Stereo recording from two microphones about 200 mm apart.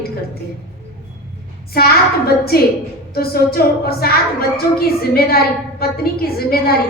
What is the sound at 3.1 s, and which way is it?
A woman's voice, 50° left (ahead or behind).